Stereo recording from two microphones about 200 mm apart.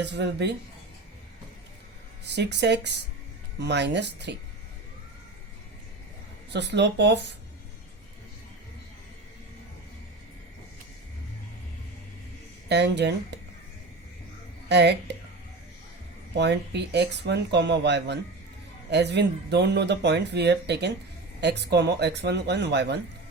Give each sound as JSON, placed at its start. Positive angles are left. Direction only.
{"t": 0.0, "sound": "speech", "side_deg": -60}
{"t": 2.2, "sound": "speech", "side_deg": -60}
{"t": 6.5, "sound": "speech", "side_deg": -60}
{"t": 12.6, "sound": "speech", "side_deg": -60}
{"t": 14.7, "sound": "speech", "side_deg": -55}
{"t": 16.4, "sound": "speech", "side_deg": -55}